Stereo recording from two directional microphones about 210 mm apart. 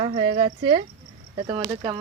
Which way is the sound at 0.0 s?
30° right (ahead or behind).